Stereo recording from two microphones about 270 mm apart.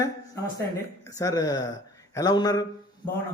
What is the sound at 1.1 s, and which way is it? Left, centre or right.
Speech, centre.